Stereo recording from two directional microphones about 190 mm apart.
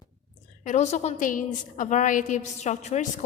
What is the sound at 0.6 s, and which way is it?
A woman's voice, 35° left (ahead or behind).